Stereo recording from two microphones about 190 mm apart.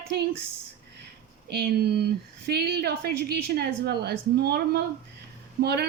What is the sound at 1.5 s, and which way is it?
A woman's voice, 55° right (ahead or behind).